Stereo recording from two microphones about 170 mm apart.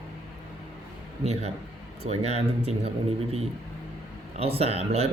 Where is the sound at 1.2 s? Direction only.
40° right (ahead or behind).